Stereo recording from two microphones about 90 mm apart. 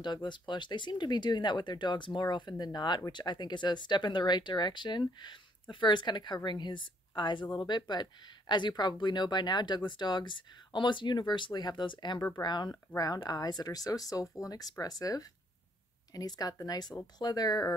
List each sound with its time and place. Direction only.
0.0 s speech: 55° left (ahead or behind)